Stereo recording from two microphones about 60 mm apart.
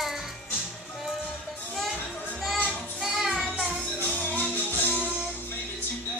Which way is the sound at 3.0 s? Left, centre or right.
Centre.